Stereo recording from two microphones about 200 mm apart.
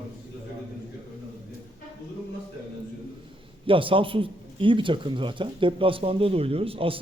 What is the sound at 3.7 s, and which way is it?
A man's voice, 25° right (ahead or behind).